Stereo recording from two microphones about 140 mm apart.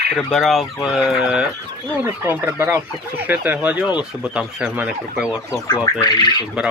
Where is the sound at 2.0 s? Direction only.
15° right (ahead or behind).